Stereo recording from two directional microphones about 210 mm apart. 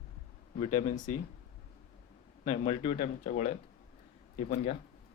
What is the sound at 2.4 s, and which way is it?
Speech, 25° left (ahead or behind).